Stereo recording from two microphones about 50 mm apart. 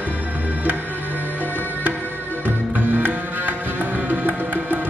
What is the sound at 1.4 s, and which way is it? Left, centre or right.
Music, left.